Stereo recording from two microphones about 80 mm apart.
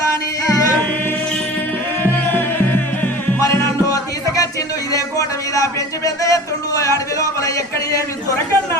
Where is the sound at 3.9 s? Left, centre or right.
Left.